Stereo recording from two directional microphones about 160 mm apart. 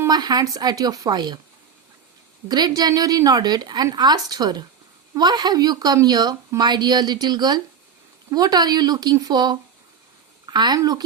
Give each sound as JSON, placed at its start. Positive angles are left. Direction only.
{"t": 0.0, "sound": "a woman's voice", "side_deg": -25}
{"t": 2.5, "sound": "a woman's voice", "side_deg": -25}